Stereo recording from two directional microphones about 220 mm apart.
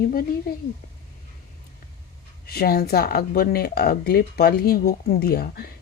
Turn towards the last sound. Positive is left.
turn(degrees=45)  # may be behind; listen again after turning